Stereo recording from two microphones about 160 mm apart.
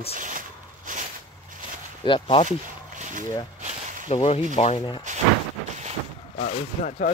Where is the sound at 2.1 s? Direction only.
30° left (ahead or behind).